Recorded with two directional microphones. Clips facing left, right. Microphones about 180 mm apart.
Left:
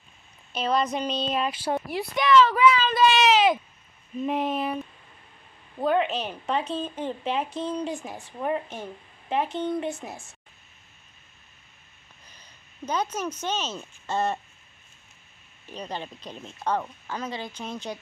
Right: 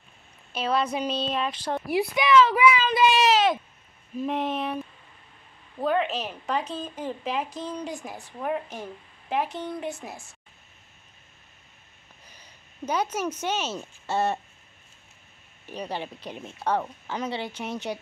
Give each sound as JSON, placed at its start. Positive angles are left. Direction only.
{"t": 0.5, "sound": "speech", "side_deg": -5}
{"t": 1.9, "sound": "speech", "side_deg": -10}
{"t": 7.4, "sound": "speech", "side_deg": 30}
{"t": 7.9, "sound": "speech", "side_deg": 0}
{"t": 12.8, "sound": "speech", "side_deg": -10}
{"t": 15.6, "sound": "speech", "side_deg": -15}